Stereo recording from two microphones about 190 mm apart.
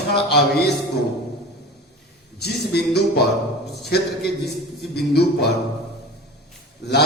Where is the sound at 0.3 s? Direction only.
60° left (ahead or behind).